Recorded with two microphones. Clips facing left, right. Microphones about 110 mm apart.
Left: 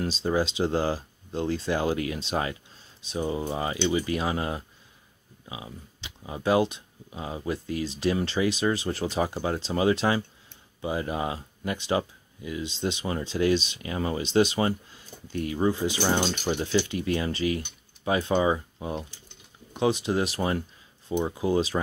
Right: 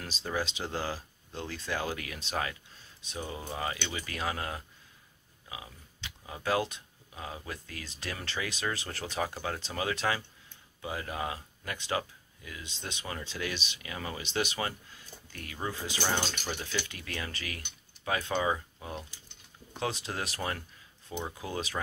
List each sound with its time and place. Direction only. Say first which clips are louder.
0.0 s speech: left 9 dB; 30° left (ahead or behind)